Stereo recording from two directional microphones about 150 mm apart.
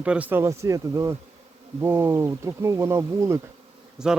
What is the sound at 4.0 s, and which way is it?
Speech, 5° right (ahead or behind).